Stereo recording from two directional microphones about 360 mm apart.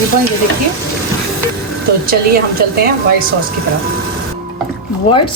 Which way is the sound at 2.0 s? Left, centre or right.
Right.